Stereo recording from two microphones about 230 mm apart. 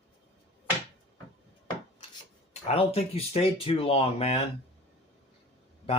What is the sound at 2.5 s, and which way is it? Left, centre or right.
Speech, left.